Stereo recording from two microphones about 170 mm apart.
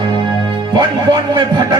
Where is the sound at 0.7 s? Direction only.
25° right (ahead or behind).